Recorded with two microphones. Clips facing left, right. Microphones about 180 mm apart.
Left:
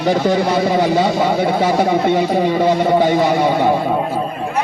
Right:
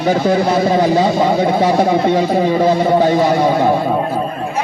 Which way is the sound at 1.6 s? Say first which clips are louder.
Right 2 dB; 5° left (ahead or behind).